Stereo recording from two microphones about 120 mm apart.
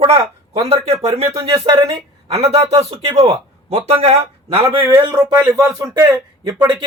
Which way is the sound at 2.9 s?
50° right (ahead or behind).